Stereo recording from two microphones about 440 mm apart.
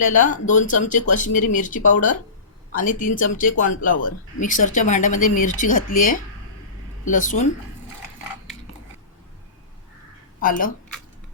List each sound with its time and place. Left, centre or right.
0.2 s speech: centre
10.4 s speech: centre